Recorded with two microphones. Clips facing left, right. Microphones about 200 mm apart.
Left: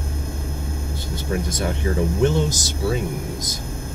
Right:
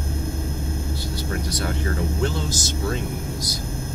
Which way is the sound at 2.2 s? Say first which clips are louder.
Left 6 dB; 15° left (ahead or behind).